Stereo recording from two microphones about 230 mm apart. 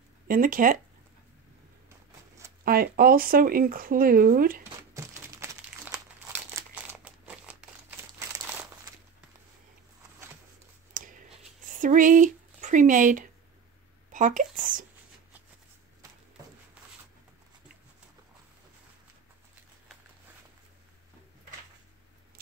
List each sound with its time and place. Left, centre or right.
0.3 s speech: right
2.6 s speech: right
4.9 s crumpling: centre
10.9 s a sound: right
11.8 s speech: right